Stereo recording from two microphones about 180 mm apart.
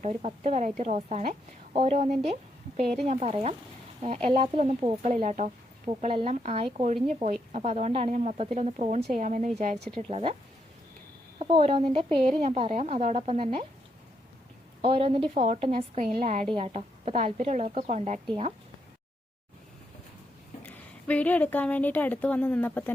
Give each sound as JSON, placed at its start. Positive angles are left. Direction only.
{"t": 0.0, "sound": "speech", "side_deg": -40}
{"t": 5.1, "sound": "speech", "side_deg": -45}
{"t": 9.0, "sound": "a woman's voice", "side_deg": -65}
{"t": 9.2, "sound": "a woman's voice", "side_deg": -45}
{"t": 11.3, "sound": "speech", "side_deg": -30}
{"t": 14.8, "sound": "speech", "side_deg": -30}
{"t": 20.7, "sound": "a woman's voice", "side_deg": 10}